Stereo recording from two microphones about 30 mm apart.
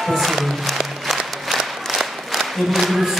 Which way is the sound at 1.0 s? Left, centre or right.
Centre.